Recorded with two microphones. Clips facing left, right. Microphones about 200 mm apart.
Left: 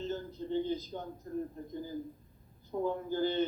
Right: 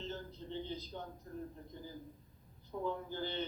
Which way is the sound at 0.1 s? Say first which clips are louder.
Left 9 dB; 45° left (ahead or behind).